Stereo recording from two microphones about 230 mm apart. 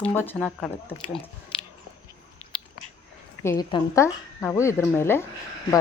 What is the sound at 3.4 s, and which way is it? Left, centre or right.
Speech, centre.